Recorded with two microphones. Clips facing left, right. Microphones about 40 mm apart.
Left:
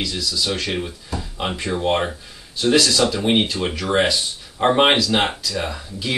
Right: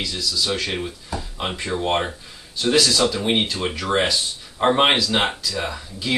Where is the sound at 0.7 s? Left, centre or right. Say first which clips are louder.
Left 1 dB; centre.